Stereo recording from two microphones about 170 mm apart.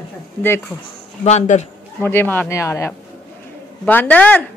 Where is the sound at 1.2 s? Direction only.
40° left (ahead or behind).